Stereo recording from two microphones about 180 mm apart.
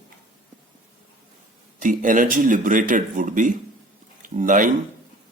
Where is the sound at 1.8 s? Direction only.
50° right (ahead or behind).